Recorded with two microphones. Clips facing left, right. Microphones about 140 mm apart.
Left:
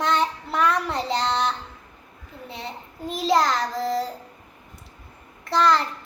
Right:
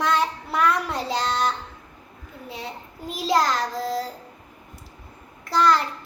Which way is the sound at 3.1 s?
Centre (ahead or behind).